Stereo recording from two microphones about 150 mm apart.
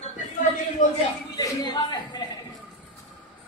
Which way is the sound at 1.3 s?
25° left (ahead or behind).